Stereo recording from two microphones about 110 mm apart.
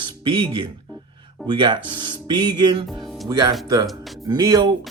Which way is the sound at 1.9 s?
45° right (ahead or behind).